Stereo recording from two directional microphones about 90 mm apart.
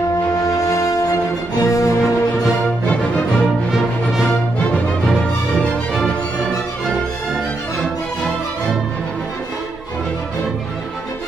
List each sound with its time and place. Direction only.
0.5 s music: 40° left (ahead or behind)
3.7 s music: 5° right (ahead or behind)
5.5 s music: 10° left (ahead or behind)